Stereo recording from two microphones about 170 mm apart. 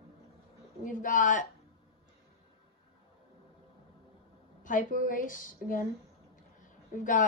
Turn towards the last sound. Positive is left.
turn(degrees=50)  # may be behind; listen again after turning